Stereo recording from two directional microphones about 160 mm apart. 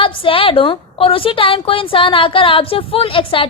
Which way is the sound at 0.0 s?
35° left (ahead or behind).